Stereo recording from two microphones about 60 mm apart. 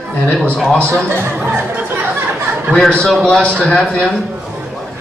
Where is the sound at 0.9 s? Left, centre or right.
Right.